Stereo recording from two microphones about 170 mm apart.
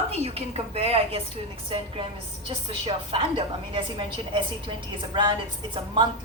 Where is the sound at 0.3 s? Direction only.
35° right (ahead or behind).